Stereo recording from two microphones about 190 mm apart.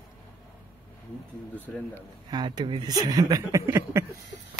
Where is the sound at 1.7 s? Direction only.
5° left (ahead or behind).